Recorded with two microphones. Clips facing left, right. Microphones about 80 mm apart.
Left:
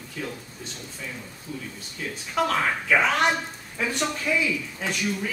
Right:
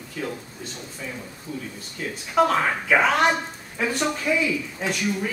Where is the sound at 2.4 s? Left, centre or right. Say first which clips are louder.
Right 2 dB; centre.